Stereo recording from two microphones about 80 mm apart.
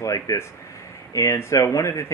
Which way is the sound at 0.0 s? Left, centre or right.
Left.